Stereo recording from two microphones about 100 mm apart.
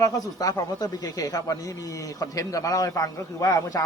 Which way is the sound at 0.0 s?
35° left (ahead or behind).